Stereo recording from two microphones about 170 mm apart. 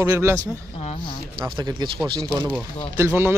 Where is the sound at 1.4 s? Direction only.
25° right (ahead or behind).